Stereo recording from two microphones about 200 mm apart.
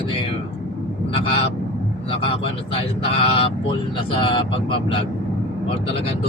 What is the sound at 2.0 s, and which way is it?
Speech, 25° left (ahead or behind).